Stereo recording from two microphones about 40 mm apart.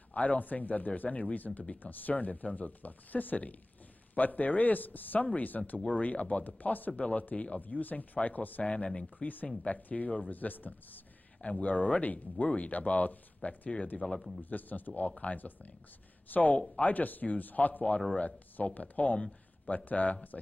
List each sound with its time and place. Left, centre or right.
0.1 s speech: left
8.6 s speech: left
9.2 s speech: left
11.6 s speech: left
14.0 s speech: centre
14.4 s speech: left
18.1 s speech: left
19.1 s a sound: left
19.7 s speech: left